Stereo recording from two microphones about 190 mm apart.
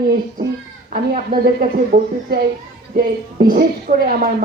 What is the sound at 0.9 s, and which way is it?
A man's voice, 50° right (ahead or behind).